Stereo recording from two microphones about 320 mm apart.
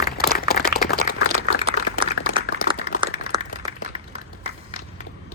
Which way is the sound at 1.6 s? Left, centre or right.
Centre.